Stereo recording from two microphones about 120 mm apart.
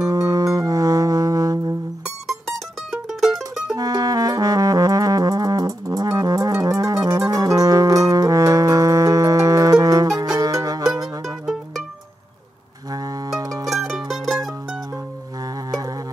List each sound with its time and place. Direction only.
0.0 s music: 30° right (ahead or behind)
2.9 s mandolin: centre (ahead or behind)
3.7 s music: 30° right (ahead or behind)
12.9 s music: 30° right (ahead or behind)
13.7 s mandolin: centre (ahead or behind)